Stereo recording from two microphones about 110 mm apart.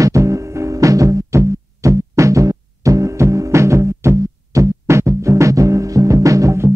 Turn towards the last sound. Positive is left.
turn(degrees=-30)  # may be behind; listen again after turning